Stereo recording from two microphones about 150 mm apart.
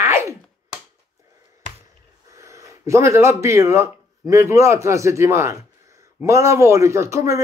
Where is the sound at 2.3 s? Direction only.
20° right (ahead or behind).